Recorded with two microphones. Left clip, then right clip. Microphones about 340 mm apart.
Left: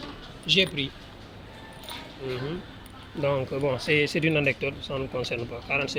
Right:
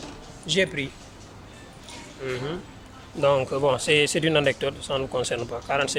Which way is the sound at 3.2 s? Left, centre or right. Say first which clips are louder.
Right 5 dB; right.